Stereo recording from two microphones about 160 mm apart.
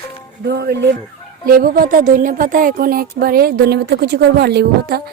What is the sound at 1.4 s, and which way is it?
A woman's voice, 65° right (ahead or behind).